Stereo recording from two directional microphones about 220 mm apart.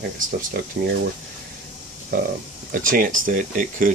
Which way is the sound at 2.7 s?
40° right (ahead or behind).